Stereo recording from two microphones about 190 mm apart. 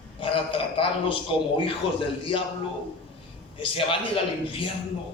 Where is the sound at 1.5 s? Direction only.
25° left (ahead or behind).